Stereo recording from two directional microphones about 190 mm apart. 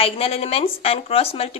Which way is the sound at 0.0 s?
30° left (ahead or behind).